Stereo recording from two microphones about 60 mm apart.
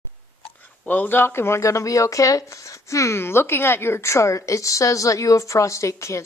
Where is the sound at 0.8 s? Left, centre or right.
Left.